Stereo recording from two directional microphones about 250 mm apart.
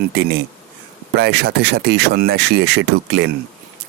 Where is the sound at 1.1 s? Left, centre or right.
Right.